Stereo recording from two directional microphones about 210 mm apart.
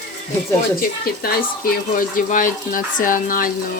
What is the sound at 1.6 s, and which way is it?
Speech, 40° left (ahead or behind).